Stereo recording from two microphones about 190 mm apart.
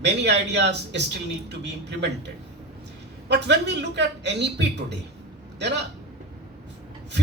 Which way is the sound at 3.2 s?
65° right (ahead or behind).